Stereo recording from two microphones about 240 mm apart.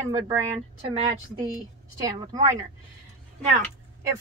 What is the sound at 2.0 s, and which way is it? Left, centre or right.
Speech, centre.